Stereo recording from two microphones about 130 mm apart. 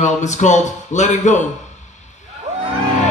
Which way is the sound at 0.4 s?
65° left (ahead or behind).